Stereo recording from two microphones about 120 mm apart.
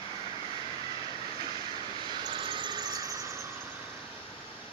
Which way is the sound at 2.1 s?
40° right (ahead or behind).